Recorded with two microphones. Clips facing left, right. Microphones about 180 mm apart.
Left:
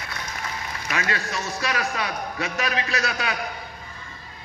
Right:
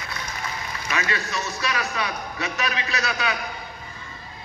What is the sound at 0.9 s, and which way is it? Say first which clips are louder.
A man's voice: even; 50° left (ahead or behind).